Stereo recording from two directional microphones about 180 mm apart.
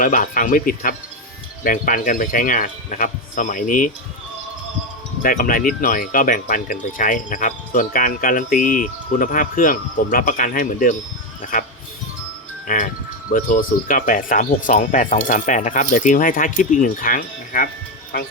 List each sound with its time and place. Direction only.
0.0 s speech: 50° left (ahead or behind)
5.2 s speech: 50° left (ahead or behind)
12.6 s speech: 45° left (ahead or behind)